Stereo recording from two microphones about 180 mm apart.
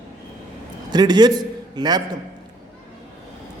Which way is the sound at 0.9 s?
25° right (ahead or behind).